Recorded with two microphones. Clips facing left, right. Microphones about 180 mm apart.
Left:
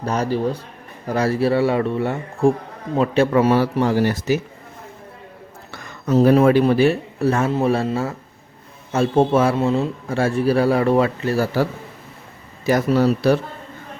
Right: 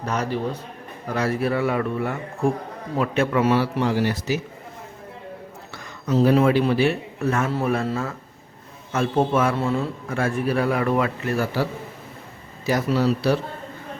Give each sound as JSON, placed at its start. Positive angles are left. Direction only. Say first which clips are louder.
{"t": 0.0, "sound": "a man's voice", "louder": "left 4 dB", "side_deg": 35}
{"t": 6.1, "sound": "a man's voice", "louder": "left 4 dB", "side_deg": 50}
{"t": 12.6, "sound": "a man's voice", "louder": "left 4 dB", "side_deg": 50}